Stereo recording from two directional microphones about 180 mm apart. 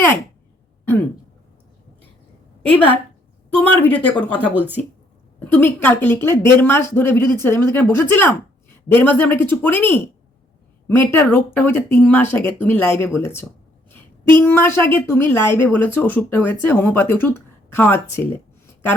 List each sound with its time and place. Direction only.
2.6 s a woman's voice: 10° left (ahead or behind)
4.5 s speech: 10° right (ahead or behind)
5.5 s a woman's voice: 10° left (ahead or behind)